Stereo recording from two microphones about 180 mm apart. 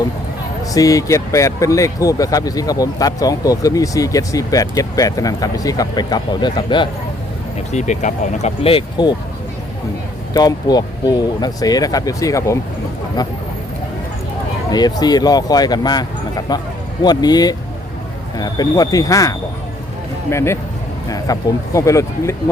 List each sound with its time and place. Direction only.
0.7 s speech: 20° left (ahead or behind)
7.7 s speech: 40° left (ahead or behind)
10.3 s speech: 20° left (ahead or behind)
14.7 s speech: 20° left (ahead or behind)